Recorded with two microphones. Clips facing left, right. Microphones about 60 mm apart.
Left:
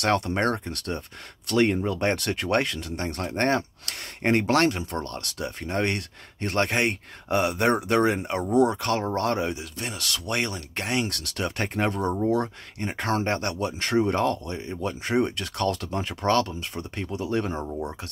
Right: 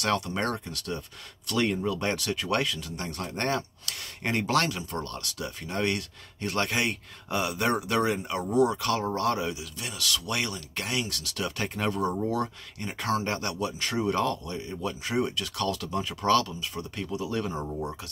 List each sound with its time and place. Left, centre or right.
0.0 s speech: left
12.1 s speech: centre
12.4 s speech: left
17.6 s speech: centre